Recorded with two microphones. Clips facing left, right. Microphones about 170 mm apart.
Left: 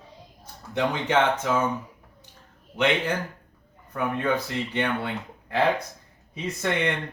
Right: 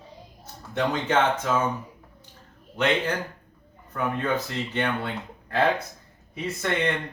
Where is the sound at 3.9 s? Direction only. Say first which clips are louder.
Left 1 dB; 15° left (ahead or behind).